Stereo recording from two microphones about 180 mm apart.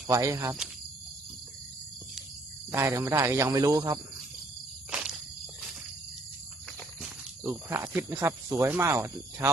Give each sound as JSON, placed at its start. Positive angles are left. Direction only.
{"t": 0.1, "sound": "speech", "side_deg": -15}
{"t": 2.7, "sound": "speech", "side_deg": -15}
{"t": 4.9, "sound": "insect", "side_deg": -5}
{"t": 7.4, "sound": "speech", "side_deg": -15}